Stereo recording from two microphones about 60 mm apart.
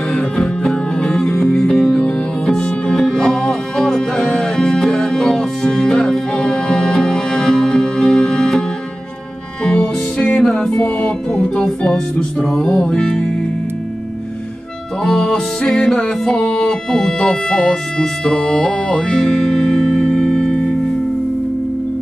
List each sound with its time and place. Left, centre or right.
0.1 s music: centre
9.7 s music: centre
15.0 s music: centre